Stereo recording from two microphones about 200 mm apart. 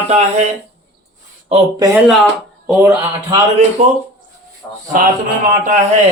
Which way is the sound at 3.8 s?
35° right (ahead or behind).